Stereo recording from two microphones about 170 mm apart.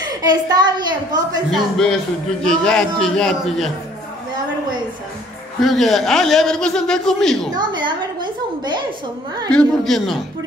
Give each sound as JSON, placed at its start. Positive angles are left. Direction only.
{"t": 0.1, "sound": "a woman's voice", "side_deg": -25}
{"t": 2.4, "sound": "a man's voice", "side_deg": 5}
{"t": 5.6, "sound": "a man's voice", "side_deg": 0}
{"t": 7.5, "sound": "a woman's voice", "side_deg": -25}
{"t": 9.5, "sound": "a man's voice", "side_deg": 5}